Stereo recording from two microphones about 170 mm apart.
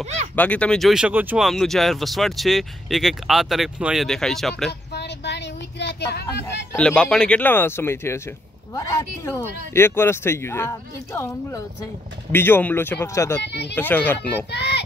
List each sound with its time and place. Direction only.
0.4 s speech: 5° left (ahead or behind)
4.9 s a sound: 80° left
6.4 s speech: 10° left (ahead or behind)
13.4 s speech: 85° left
13.7 s speech: 10° left (ahead or behind)
14.5 s a child's voice: 90° left